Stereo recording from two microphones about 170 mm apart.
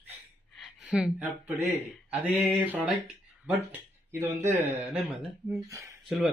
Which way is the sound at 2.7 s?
Centre (ahead or behind).